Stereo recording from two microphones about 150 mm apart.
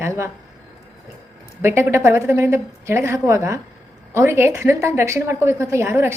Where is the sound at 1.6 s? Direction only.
15° right (ahead or behind).